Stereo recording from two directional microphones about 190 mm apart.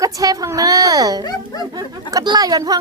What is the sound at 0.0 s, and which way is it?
A woman's voice, 20° right (ahead or behind).